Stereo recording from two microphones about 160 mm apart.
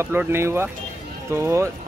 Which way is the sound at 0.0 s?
15° right (ahead or behind).